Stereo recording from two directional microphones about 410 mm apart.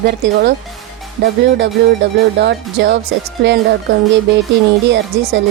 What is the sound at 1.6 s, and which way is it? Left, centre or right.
Speech, right.